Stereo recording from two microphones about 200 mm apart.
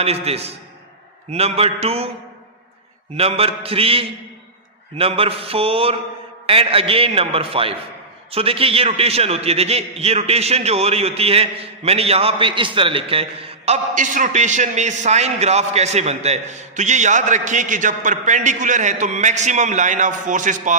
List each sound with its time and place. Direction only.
0.0 s a man's voice: 30° right (ahead or behind)
3.2 s a man's voice: 30° right (ahead or behind)